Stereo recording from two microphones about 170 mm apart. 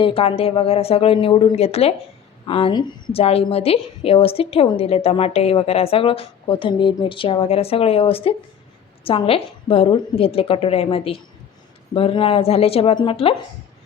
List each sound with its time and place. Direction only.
0.0 s a woman's voice: 35° left (ahead or behind)